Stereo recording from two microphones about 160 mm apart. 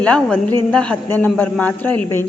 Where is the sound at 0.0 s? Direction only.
10° left (ahead or behind).